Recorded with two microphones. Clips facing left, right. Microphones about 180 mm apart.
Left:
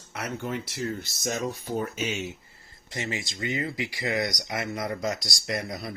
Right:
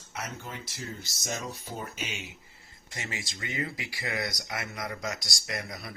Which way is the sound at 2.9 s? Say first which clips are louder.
Left 6 dB; 25° left (ahead or behind).